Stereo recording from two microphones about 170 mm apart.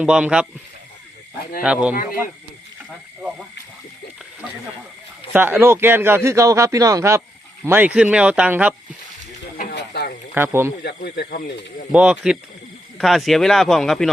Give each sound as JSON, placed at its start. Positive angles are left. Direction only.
{"t": 0.0, "sound": "speech", "side_deg": -5}
{"t": 1.6, "sound": "speech", "side_deg": -5}
{"t": 5.3, "sound": "speech", "side_deg": -15}
{"t": 9.6, "sound": "frying", "side_deg": 70}
{"t": 10.3, "sound": "speech", "side_deg": -15}
{"t": 10.8, "sound": "speech", "side_deg": 75}
{"t": 11.9, "sound": "speech", "side_deg": -5}